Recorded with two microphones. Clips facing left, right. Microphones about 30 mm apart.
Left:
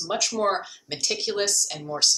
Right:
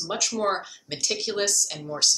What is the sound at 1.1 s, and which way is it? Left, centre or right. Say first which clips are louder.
Speech: left 1 dB; centre.